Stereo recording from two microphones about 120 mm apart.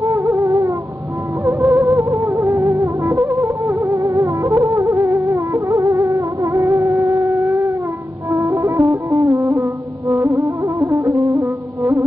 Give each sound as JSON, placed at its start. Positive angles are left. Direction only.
{"t": 0.0, "sound": "music", "side_deg": -25}